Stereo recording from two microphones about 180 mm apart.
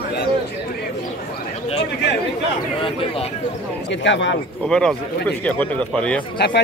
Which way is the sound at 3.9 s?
85° left.